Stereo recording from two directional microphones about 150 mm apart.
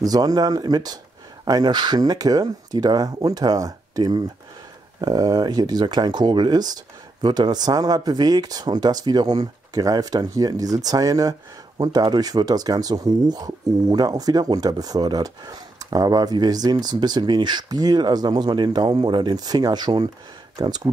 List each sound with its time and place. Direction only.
0.0 s speech: 25° right (ahead or behind)